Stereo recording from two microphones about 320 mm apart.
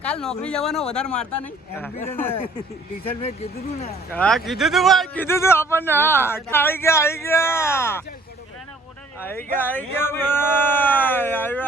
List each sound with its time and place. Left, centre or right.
0.0 s speech: centre
3.2 s speech: centre
4.1 s a man's voice: centre
9.2 s speech: centre